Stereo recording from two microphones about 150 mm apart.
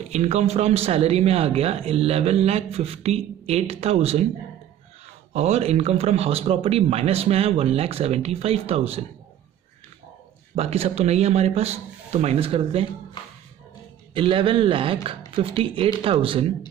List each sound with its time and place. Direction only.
0.1 s speech: 45° right (ahead or behind)
5.3 s speech: 45° right (ahead or behind)
10.5 s speech: 45° right (ahead or behind)
14.1 s speech: 35° right (ahead or behind)